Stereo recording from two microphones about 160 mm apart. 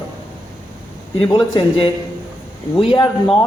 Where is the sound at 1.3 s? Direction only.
30° left (ahead or behind).